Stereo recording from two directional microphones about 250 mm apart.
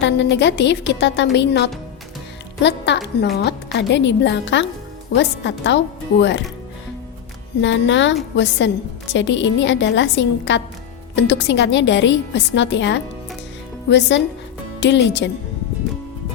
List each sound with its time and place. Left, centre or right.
0.0 s a woman's voice: left
7.6 s a woman's voice: left
14.8 s a woman's voice: left